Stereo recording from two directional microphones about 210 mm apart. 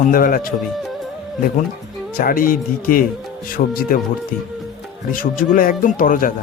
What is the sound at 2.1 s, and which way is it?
Speech, 45° left (ahead or behind).